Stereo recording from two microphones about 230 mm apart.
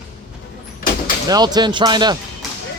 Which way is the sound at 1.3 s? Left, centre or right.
Centre.